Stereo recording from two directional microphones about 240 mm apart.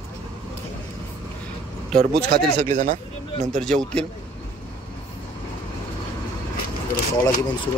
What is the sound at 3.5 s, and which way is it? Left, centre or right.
Speech, centre.